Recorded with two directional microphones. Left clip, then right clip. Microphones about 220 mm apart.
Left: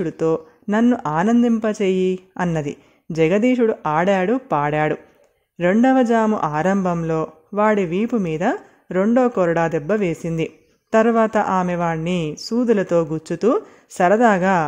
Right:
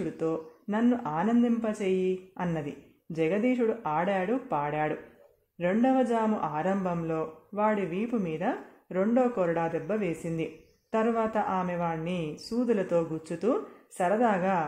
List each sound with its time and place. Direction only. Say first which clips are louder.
0.0 s speech: left 11 dB; 45° left (ahead or behind)